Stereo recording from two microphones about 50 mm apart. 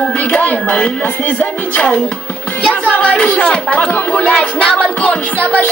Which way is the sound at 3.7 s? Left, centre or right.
Left.